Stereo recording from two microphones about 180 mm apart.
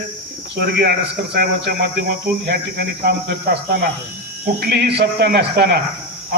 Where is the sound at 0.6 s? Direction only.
65° right (ahead or behind).